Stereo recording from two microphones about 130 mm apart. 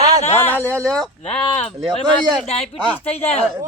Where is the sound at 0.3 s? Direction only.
15° left (ahead or behind).